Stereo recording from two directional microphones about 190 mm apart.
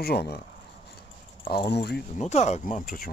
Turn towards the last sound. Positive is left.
turn(degrees=45)  # may be behind; listen again after turning